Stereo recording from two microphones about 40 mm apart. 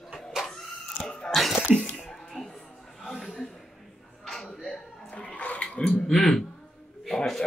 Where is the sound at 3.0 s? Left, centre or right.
Centre.